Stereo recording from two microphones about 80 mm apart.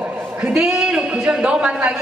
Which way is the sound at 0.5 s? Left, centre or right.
Centre.